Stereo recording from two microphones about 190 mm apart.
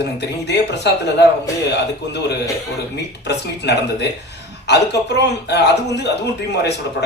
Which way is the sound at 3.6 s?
60° left (ahead or behind).